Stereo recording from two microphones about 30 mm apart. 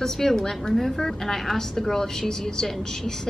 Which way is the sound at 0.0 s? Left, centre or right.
Centre.